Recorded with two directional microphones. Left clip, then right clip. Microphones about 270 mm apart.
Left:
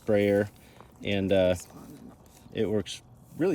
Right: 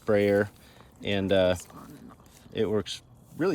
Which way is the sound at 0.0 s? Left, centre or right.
Centre.